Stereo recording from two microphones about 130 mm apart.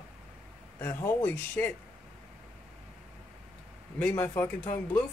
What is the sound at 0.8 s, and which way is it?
Speech, 15° left (ahead or behind).